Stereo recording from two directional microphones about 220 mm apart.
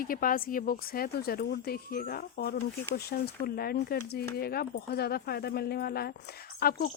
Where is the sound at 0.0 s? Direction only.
40° left (ahead or behind).